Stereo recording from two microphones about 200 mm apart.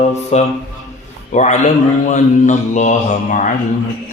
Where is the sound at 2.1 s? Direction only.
35° left (ahead or behind).